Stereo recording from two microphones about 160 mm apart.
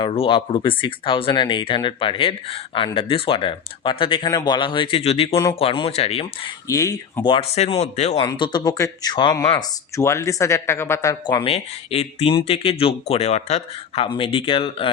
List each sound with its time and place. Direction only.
0.0 s speech: 35° left (ahead or behind)
6.7 s speech: 20° left (ahead or behind)
7.3 s speech: 35° left (ahead or behind)
8.1 s speech: 25° left (ahead or behind)
11.5 s speech: 40° left (ahead or behind)